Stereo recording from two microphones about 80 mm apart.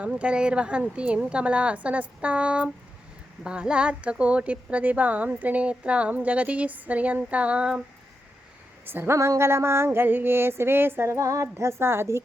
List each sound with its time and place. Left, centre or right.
0.0 s a woman's voice: centre
8.9 s a woman's voice: right
9.1 s a sound: right